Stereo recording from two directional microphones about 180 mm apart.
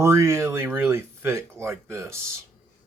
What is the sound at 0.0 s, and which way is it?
Speech, 15° right (ahead or behind).